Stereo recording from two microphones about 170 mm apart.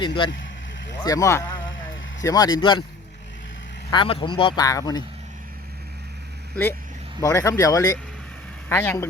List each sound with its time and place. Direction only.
0.0 s speech: 30° left (ahead or behind)
3.9 s speech: 30° left (ahead or behind)
7.2 s speech: 20° left (ahead or behind)